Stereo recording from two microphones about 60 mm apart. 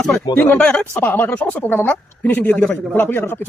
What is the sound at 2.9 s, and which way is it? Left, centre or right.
Speech, left.